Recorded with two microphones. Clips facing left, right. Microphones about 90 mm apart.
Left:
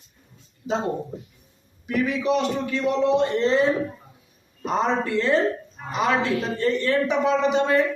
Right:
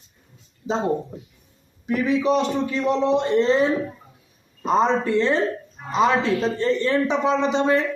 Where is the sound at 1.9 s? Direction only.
20° right (ahead or behind).